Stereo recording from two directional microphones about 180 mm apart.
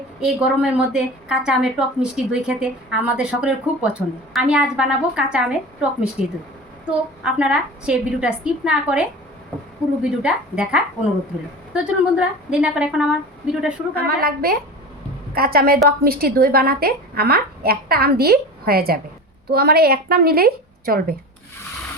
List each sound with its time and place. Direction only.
0.2 s a woman's voice: 5° right (ahead or behind)
13.9 s a woman's voice: 60° right (ahead or behind)